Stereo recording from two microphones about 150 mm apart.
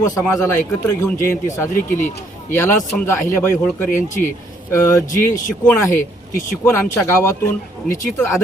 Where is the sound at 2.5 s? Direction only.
15° left (ahead or behind).